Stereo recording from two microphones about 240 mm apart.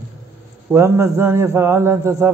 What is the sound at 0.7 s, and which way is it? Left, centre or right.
A man's voice, centre.